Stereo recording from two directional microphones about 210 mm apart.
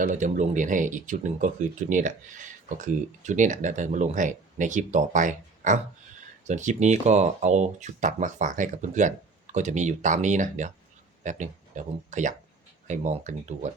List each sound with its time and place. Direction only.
0.0 s speech: 35° right (ahead or behind)